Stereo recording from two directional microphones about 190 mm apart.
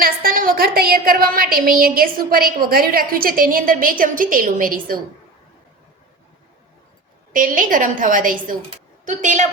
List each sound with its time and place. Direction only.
0.0 s a woman's voice: 50° right (ahead or behind)
7.3 s a woman's voice: 45° right (ahead or behind)